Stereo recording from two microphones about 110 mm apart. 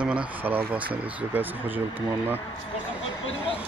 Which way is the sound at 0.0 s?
10° right (ahead or behind).